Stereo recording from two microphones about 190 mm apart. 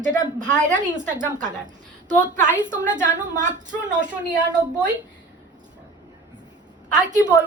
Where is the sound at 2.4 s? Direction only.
40° right (ahead or behind).